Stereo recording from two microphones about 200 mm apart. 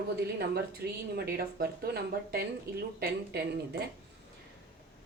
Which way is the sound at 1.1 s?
50° right (ahead or behind).